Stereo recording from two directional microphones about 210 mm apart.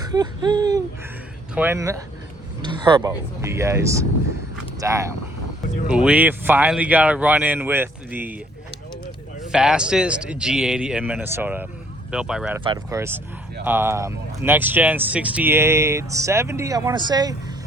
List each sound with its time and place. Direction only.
0.0 s a sound: 20° right (ahead or behind)
1.5 s speech: 10° right (ahead or behind)
2.6 s a sound: 20° right (ahead or behind)
3.1 s speech: 15° right (ahead or behind)
9.5 s a man's voice: 5° right (ahead or behind)
12.6 s speech: 15° right (ahead or behind)